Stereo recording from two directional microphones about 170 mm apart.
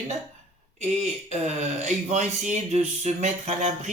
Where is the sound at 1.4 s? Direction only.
45° right (ahead or behind).